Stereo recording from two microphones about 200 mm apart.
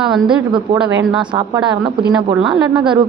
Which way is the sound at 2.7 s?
25° right (ahead or behind).